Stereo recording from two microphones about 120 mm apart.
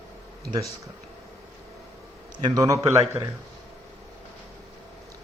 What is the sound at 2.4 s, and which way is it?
Speech, 35° right (ahead or behind).